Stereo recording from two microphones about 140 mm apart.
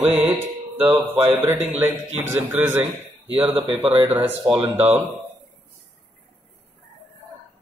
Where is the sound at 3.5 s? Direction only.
40° right (ahead or behind).